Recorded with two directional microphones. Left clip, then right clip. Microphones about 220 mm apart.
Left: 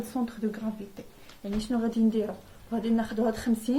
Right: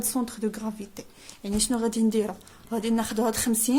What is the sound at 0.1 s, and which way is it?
Speech, 60° right (ahead or behind).